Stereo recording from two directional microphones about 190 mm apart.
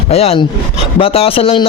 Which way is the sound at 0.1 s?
30° left (ahead or behind).